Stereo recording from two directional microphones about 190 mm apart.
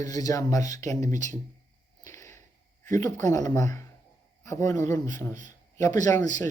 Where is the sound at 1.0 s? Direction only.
40° right (ahead or behind).